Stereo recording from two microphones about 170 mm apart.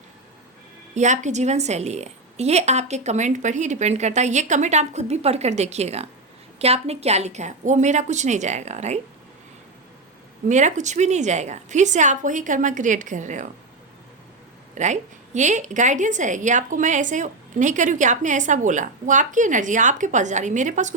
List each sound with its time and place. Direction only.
0.9 s a woman's voice: 45° right (ahead or behind)
10.5 s a woman's voice: 45° right (ahead or behind)
14.8 s a woman's voice: 45° right (ahead or behind)